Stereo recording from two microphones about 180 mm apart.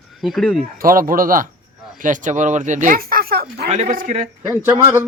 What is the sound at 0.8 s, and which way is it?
Speech, 50° right (ahead or behind).